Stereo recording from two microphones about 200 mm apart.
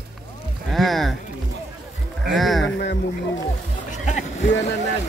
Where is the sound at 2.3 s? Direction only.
Centre (ahead or behind).